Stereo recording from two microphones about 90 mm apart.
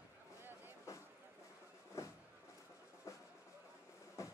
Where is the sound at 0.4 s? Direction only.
25° right (ahead or behind).